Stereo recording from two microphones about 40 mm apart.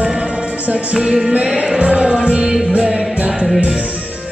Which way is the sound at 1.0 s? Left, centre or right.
Right.